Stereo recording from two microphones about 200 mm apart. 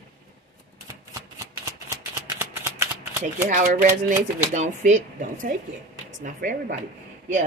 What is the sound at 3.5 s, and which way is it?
Speech, 40° right (ahead or behind).